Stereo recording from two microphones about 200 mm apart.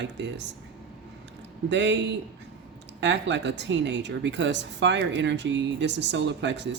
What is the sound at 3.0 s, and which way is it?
Speech, 60° right (ahead or behind).